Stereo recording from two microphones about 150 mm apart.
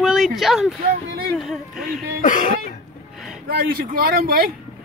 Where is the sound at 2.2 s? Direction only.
60° left (ahead or behind).